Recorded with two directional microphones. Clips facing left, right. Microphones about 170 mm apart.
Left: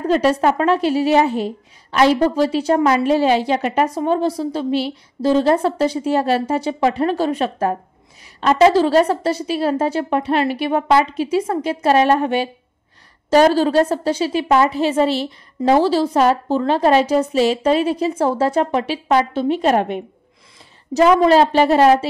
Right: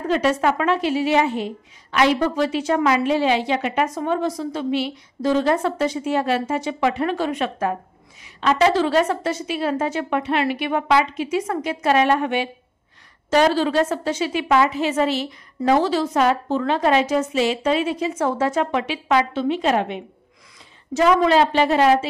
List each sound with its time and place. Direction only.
0.1 s a woman's voice: 35° left (ahead or behind)